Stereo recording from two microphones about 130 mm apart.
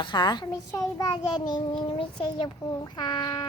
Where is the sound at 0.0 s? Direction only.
35° left (ahead or behind).